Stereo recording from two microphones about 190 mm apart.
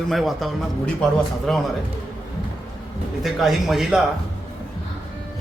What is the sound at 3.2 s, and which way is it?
Speech, centre (ahead or behind).